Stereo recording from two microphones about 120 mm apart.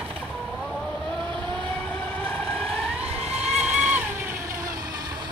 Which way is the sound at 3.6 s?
10° right (ahead or behind).